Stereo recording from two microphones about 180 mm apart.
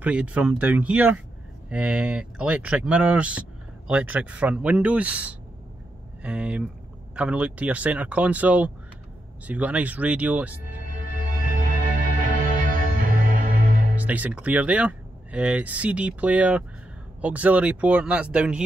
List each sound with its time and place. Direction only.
0.0 s speech: 5° right (ahead or behind)
10.9 s music: 50° right (ahead or behind)
13.9 s speech: 10° right (ahead or behind)